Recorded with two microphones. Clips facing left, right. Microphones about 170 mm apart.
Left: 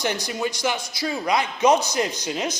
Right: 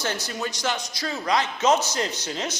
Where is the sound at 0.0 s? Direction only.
15° left (ahead or behind).